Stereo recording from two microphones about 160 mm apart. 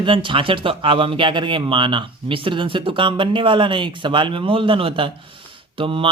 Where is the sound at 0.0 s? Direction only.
30° right (ahead or behind).